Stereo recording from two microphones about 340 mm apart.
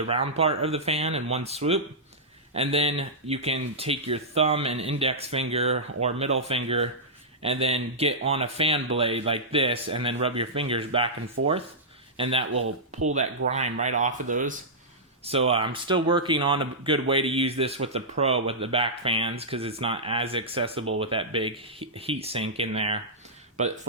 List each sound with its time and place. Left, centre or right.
0.1 s speech: centre
12.1 s speech: centre